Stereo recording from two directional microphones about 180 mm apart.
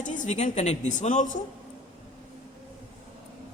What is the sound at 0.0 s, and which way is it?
A woman's voice, 45° left (ahead or behind).